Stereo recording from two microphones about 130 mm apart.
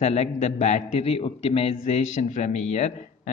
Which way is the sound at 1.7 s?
75° left (ahead or behind).